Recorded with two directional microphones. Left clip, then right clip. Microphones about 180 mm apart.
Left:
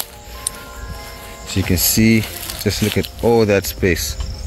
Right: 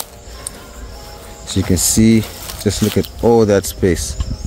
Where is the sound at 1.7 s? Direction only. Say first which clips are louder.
Right 2 dB; 35° right (ahead or behind).